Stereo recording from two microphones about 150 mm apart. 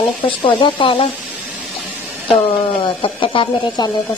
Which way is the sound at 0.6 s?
35° left (ahead or behind).